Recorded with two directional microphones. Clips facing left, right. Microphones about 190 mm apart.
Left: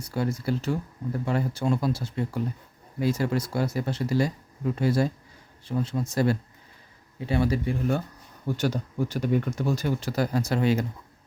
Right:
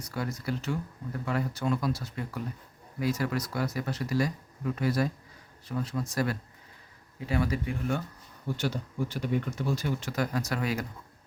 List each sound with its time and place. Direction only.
0.0 s speech: 30° left (ahead or behind)